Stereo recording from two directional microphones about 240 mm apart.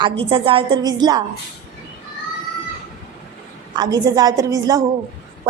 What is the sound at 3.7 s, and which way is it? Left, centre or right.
A woman's voice, centre.